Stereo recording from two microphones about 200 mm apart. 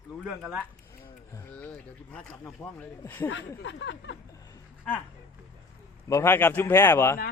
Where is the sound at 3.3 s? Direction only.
70° left (ahead or behind).